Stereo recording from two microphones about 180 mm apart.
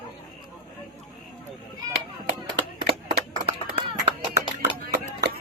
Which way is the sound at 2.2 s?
65° right (ahead or behind).